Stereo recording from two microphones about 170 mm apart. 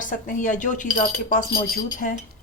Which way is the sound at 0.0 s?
50° left (ahead or behind).